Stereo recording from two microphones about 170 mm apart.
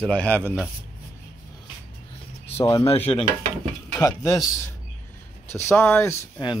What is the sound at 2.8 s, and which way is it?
Cutlery, 35° left (ahead or behind).